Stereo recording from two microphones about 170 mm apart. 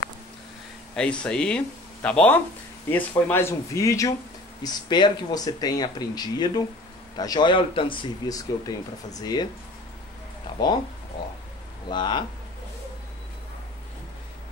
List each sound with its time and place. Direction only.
0.9 s speech: 5° left (ahead or behind); by 9.5 s 25° left (ahead or behind)
10.4 s a sound: 25° left (ahead or behind)
11.9 s speech: 25° left (ahead or behind)